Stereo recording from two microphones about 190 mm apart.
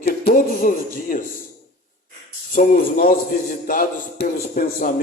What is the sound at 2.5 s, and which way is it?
A man's voice, 45° left (ahead or behind).